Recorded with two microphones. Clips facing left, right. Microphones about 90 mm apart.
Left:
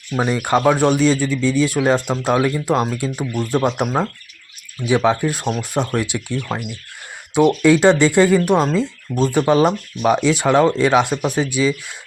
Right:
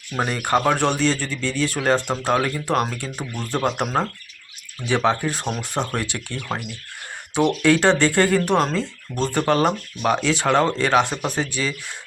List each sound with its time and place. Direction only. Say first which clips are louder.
0.3 s speech: left 4 dB; 15° left (ahead or behind)
6.0 s speech: left 6 dB; 15° left (ahead or behind)
7.4 s speech: left 5 dB; 10° left (ahead or behind)